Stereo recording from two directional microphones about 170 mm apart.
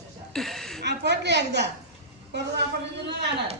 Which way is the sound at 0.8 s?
90° right.